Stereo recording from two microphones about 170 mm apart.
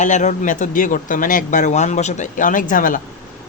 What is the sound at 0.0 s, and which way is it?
Speech, 45° left (ahead or behind).